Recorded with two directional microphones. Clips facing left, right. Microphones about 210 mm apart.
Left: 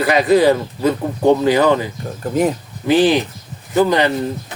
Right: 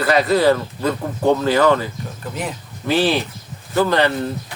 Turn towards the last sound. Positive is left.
turn(degrees=15)  # may be behind; listen again after turning